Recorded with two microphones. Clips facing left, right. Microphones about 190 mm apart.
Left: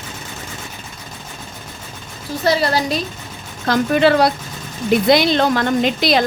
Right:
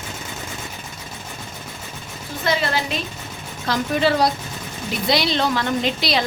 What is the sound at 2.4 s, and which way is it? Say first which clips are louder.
Speech: left 5 dB; 40° left (ahead or behind).